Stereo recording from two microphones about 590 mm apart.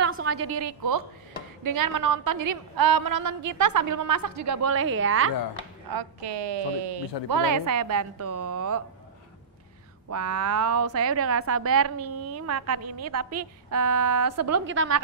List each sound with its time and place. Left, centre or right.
0.1 s a sound: right
0.5 s a woman's voice: right
5.9 s a woman's voice: right
10.0 s a woman's voice: right